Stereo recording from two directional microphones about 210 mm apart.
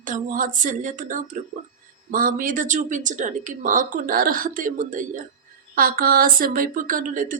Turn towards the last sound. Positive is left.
turn(degrees=-40)  # may be behind; listen again after turning